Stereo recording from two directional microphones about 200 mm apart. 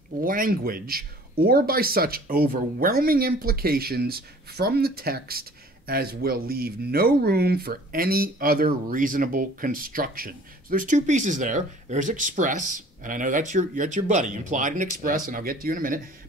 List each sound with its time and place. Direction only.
0.2 s speech: 45° right (ahead or behind)